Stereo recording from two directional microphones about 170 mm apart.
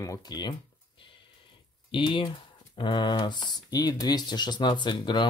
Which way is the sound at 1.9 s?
30° left (ahead or behind).